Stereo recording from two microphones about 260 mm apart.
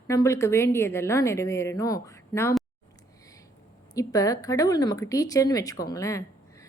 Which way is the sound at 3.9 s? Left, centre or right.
Centre.